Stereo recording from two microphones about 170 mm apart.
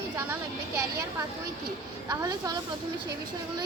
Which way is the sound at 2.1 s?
20° right (ahead or behind).